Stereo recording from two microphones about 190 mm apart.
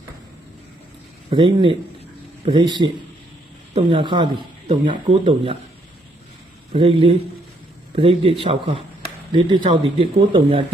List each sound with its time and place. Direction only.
1.3 s speech: 25° right (ahead or behind)
6.7 s speech: 30° right (ahead or behind)